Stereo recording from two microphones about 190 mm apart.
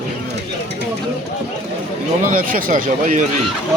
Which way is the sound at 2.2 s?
45° right (ahead or behind).